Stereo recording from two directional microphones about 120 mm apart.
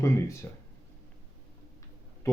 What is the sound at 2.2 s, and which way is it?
Speech, 25° left (ahead or behind).